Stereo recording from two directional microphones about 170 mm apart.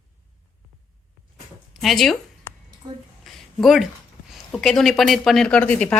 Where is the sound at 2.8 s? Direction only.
25° right (ahead or behind).